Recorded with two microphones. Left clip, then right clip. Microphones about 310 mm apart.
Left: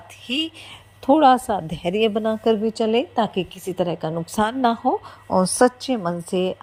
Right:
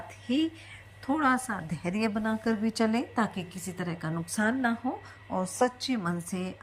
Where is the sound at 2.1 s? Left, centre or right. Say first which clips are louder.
Left 11 dB; centre.